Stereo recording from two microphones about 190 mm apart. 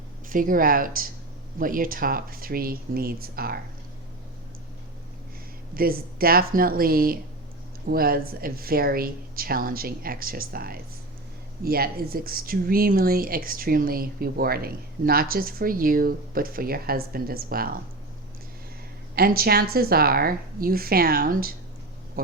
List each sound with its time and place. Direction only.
0.3 s speech: 45° right (ahead or behind)
5.7 s speech: 50° right (ahead or behind)
19.1 s speech: 55° right (ahead or behind)